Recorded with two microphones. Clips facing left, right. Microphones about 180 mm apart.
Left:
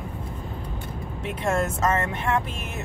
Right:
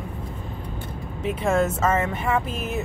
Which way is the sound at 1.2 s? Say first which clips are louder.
Right 4 dB; 5° right (ahead or behind).